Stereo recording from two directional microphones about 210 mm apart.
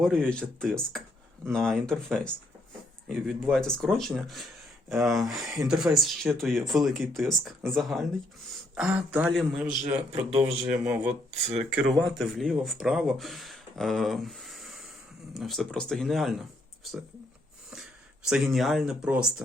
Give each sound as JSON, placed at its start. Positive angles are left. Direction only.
{"t": 0.0, "sound": "speech", "side_deg": 5}
{"t": 10.1, "sound": "speech", "side_deg": -30}
{"t": 11.9, "sound": "speech", "side_deg": 0}
{"t": 18.3, "sound": "speech", "side_deg": 0}